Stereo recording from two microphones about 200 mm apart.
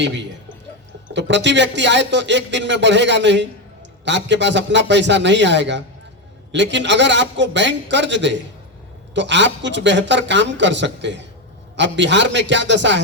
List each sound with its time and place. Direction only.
1.1 s speech: 65° right (ahead or behind)